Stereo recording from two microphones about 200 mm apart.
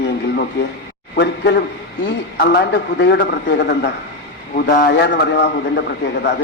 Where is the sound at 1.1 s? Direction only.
55° left (ahead or behind).